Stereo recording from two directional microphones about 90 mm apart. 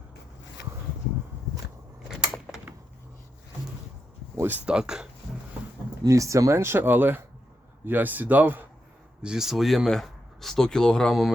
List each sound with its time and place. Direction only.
2.0 s a sound: 5° right (ahead or behind)
4.4 s speech: 20° right (ahead or behind)
4.7 s speech: 10° right (ahead or behind)
6.1 s speech: 35° right (ahead or behind); by 8.6 s 20° right (ahead or behind)
9.2 s speech: 5° right (ahead or behind)